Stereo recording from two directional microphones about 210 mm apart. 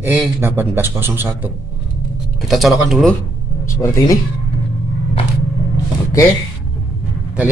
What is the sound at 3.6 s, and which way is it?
Speech, 15° left (ahead or behind).